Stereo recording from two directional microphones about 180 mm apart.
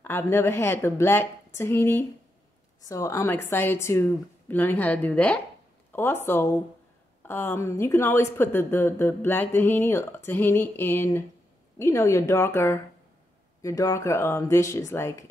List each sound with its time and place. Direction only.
0.0 s a woman's voice: 15° left (ahead or behind)